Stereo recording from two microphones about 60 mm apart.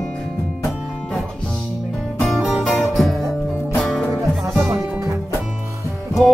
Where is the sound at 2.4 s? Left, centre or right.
Centre.